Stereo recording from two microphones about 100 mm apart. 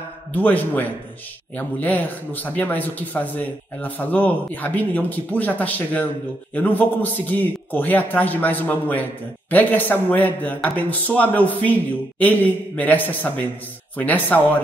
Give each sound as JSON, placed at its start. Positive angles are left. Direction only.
{"t": 0.3, "sound": "a man's voice", "side_deg": 15}